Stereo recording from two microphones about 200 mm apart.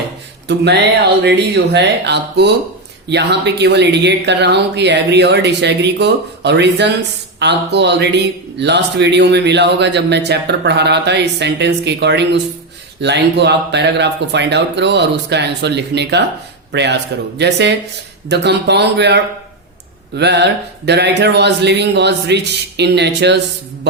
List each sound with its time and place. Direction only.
0.4 s speech: 60° right (ahead or behind)